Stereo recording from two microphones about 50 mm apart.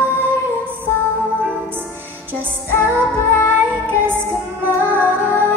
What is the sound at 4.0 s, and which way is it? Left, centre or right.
Female singing, right.